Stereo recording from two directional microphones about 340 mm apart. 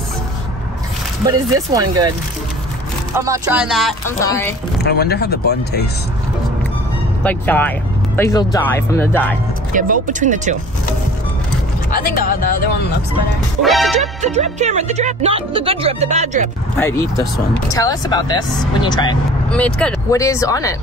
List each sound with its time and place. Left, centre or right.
1.2 s speech: centre
3.2 s speech: centre
4.7 s speech: left
7.2 s speech: centre
9.8 s speech: right
11.9 s speech: left
13.6 s speech: centre
14.2 s speech: centre
16.7 s speech: centre